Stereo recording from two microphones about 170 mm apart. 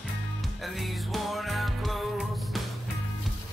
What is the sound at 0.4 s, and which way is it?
Music, centre (ahead or behind).